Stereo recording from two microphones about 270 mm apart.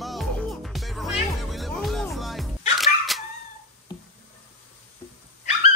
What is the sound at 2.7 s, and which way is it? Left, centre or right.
Dog, centre.